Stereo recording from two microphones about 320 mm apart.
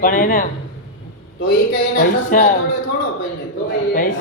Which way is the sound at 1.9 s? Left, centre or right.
Left.